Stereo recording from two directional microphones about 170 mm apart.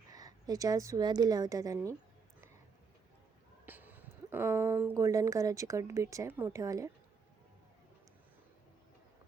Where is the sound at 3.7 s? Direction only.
10° right (ahead or behind).